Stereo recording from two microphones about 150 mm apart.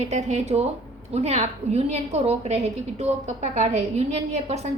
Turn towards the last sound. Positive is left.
turn(degrees=-45)  # may be behind; listen again after turning